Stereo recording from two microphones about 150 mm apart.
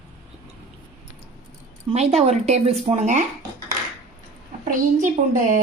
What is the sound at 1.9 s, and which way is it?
A woman's voice, 45° right (ahead or behind).